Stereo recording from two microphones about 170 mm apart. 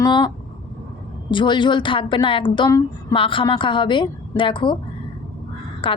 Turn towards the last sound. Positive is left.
turn(degrees=30)  # may be behind; listen again after turning